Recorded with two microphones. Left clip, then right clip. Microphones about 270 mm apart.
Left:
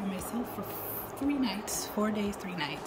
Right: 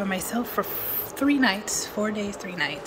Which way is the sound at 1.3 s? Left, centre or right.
Centre.